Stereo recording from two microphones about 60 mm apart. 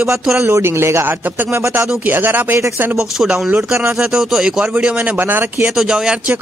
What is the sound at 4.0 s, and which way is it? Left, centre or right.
Speech, centre.